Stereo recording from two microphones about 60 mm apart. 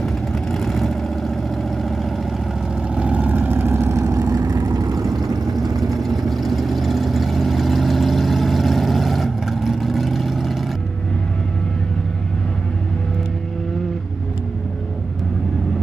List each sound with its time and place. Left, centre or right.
0.0 s vehicle: centre
2.9 s vehicle: centre; by 5.8 s right
5.8 s vehicle: centre